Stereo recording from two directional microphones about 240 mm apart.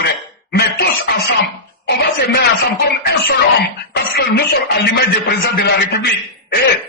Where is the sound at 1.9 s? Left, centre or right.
Left.